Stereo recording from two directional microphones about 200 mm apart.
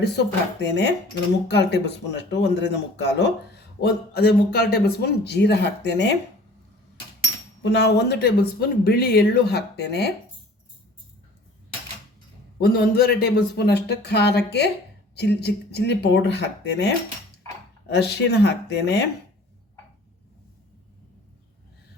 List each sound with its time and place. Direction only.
0.0 s speech: 60° left (ahead or behind)
7.6 s speech: 60° left (ahead or behind)
12.5 s speech: 50° left (ahead or behind)